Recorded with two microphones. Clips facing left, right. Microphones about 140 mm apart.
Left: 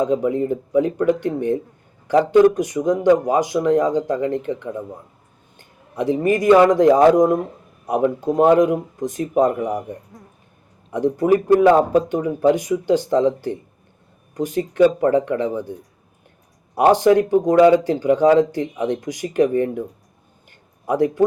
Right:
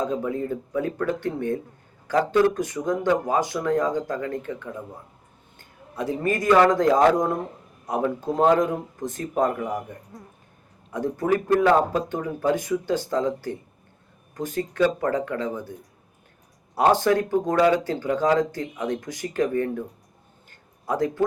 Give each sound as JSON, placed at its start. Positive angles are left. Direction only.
{"t": 0.0, "sound": "speech", "side_deg": 20}
{"t": 16.7, "sound": "speech", "side_deg": 15}
{"t": 20.8, "sound": "speech", "side_deg": 15}